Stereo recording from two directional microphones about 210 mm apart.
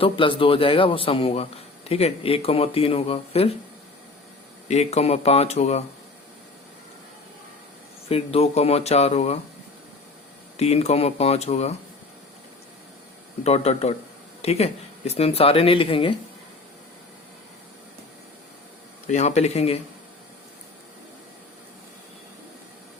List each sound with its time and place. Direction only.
0.0 s a man's voice: 25° left (ahead or behind)
4.7 s speech: 30° left (ahead or behind)
8.0 s a man's voice: 30° left (ahead or behind)
10.6 s speech: 30° left (ahead or behind)
13.4 s a man's voice: 30° left (ahead or behind)
19.0 s speech: 35° left (ahead or behind)